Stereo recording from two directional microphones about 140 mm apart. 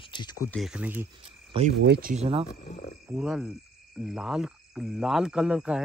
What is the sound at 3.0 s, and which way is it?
Cricket, 10° right (ahead or behind).